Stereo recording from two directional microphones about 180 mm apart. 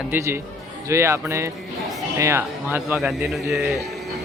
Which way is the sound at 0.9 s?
15° right (ahead or behind).